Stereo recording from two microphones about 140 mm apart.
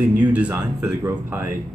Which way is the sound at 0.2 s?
10° right (ahead or behind).